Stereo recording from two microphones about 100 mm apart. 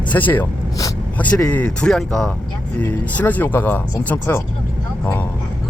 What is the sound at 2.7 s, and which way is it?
Speech, 15° left (ahead or behind).